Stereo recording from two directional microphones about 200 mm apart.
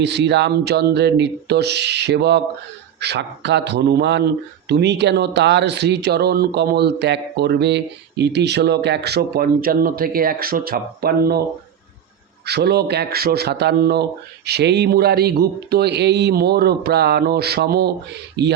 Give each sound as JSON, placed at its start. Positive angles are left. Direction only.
{"t": 0.0, "sound": "speech", "side_deg": -60}
{"t": 12.5, "sound": "a man's voice", "side_deg": -55}